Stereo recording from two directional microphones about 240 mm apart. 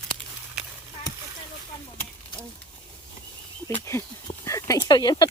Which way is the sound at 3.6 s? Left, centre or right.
Centre.